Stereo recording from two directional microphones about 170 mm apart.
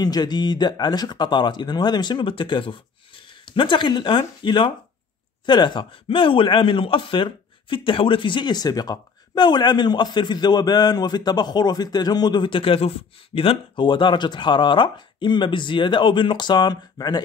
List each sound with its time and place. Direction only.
0.0 s a man's voice: 25° left (ahead or behind)